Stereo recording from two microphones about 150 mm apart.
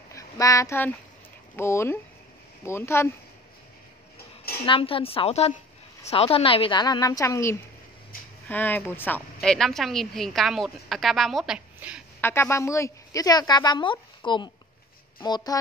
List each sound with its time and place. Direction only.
0.1 s speech: 20° left (ahead or behind)
4.6 s a woman's voice: 35° left (ahead or behind); by 9.2 s 15° left (ahead or behind)
9.4 s speech: centre (ahead or behind)
12.2 s a woman's voice: 15° left (ahead or behind)